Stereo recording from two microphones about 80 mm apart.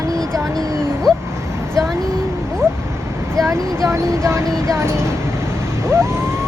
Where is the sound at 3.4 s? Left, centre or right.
Right.